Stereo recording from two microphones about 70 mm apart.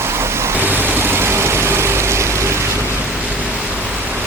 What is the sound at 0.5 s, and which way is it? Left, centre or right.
Vehicle, right.